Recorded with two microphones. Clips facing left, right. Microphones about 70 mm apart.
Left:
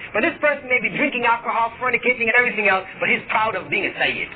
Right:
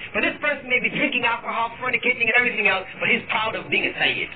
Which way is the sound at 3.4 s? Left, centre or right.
Left.